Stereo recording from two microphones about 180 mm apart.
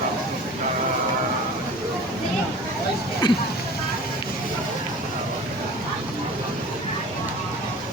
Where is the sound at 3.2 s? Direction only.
25° left (ahead or behind).